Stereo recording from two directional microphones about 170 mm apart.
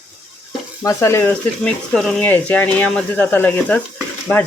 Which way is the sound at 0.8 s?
15° left (ahead or behind).